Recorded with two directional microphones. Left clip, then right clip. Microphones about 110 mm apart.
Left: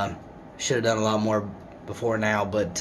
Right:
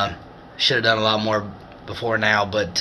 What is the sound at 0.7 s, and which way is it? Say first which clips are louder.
Speech: right 5 dB; 30° left (ahead or behind).